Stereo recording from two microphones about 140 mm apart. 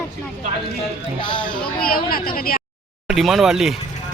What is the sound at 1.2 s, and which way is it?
Speech, 35° left (ahead or behind).